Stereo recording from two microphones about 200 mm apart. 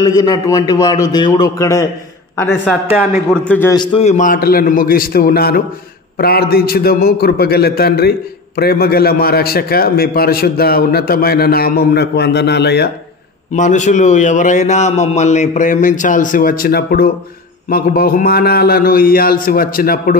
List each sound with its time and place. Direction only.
0.0 s a man's voice: 20° left (ahead or behind)
2.9 s a man's voice: 10° right (ahead or behind)
3.4 s a man's voice: 10° left (ahead or behind)
3.7 s a man's voice: 25° left (ahead or behind)
4.0 s a man's voice: 35° left (ahead or behind); by 12.9 s 55° left (ahead or behind)
13.5 s a man's voice: 35° left (ahead or behind)